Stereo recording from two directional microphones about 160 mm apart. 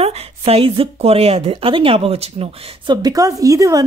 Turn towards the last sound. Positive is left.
turn(degrees=-20)  # may be behind; listen again after turning